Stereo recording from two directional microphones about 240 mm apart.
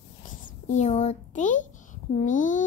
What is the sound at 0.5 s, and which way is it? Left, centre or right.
A child's voice, left.